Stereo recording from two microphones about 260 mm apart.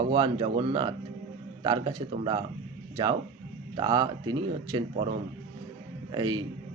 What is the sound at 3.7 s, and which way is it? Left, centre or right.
A man's voice, centre.